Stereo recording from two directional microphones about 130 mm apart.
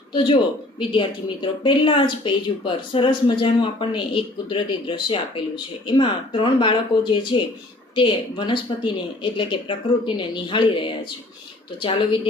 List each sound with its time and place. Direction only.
0.1 s speech: 40° left (ahead or behind)